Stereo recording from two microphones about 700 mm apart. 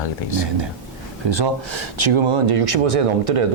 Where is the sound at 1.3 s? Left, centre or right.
Right.